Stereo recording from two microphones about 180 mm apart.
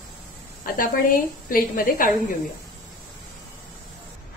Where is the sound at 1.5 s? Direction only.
50° left (ahead or behind).